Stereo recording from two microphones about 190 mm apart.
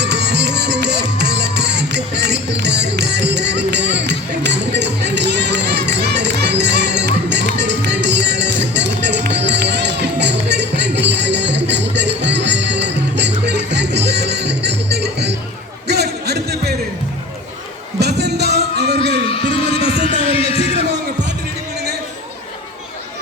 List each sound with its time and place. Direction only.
0.0 s music: 65° right (ahead or behind)
18.0 s music: 60° right (ahead or behind)
19.0 s a sound: 60° right (ahead or behind)
19.3 s music: 30° left (ahead or behind)
20.2 s heart sounds: 30° left (ahead or behind)
20.9 s music: 65° right (ahead or behind)